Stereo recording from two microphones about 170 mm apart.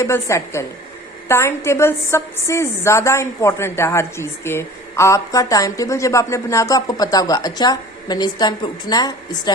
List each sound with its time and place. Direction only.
0.0 s a woman's voice: 15° left (ahead or behind)